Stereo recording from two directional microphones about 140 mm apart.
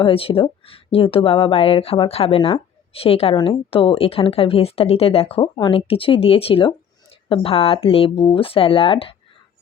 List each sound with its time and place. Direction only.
0.0 s speech: 40° left (ahead or behind)